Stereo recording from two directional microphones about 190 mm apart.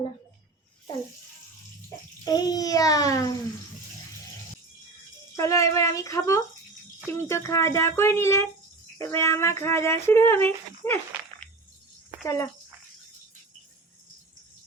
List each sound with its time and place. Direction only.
2.2 s a child's voice: 20° left (ahead or behind)
5.4 s speech: 15° left (ahead or behind)